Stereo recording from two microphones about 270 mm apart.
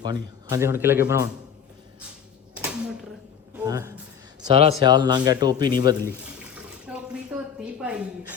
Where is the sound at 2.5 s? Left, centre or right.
Centre.